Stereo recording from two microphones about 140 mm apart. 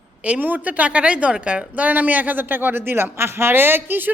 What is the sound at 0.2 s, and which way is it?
A woman's voice, 10° right (ahead or behind).